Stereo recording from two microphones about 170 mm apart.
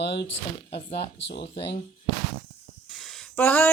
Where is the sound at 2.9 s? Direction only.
Centre (ahead or behind).